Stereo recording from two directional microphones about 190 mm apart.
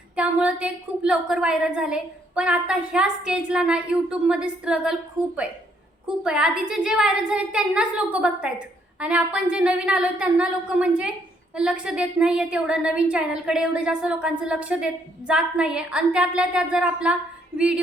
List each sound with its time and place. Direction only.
0.2 s a woman's voice: 5° right (ahead or behind)